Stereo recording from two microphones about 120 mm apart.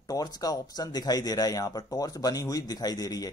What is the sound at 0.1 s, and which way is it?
Speech, 30° left (ahead or behind).